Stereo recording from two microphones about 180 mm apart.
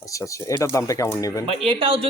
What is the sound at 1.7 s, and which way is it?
Speech, 30° right (ahead or behind).